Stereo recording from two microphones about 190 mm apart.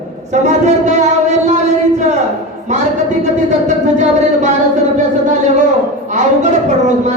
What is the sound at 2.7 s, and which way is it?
A man's voice, 40° right (ahead or behind).